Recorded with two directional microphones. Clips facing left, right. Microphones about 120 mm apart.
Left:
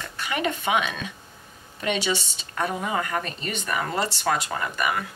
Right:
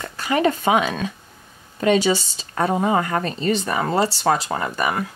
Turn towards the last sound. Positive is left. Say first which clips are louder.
# right 4 dB
turn(degrees=-35)  # may be behind; listen again after turning